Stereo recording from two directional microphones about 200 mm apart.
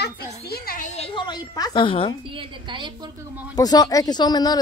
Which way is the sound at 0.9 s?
25° left (ahead or behind).